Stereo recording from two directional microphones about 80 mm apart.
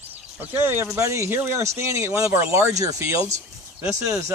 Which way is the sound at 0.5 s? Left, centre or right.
Right.